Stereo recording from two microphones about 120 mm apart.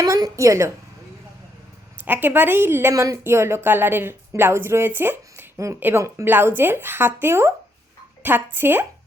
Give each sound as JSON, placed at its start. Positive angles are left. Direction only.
{"t": 0.0, "sound": "a woman's voice", "side_deg": -30}
{"t": 2.0, "sound": "a woman's voice", "side_deg": -15}